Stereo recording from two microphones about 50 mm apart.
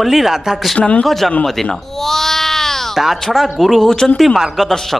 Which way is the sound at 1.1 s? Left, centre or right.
Centre.